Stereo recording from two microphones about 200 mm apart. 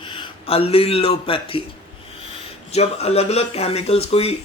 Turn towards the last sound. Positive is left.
turn(degrees=30)  # may be behind; listen again after turning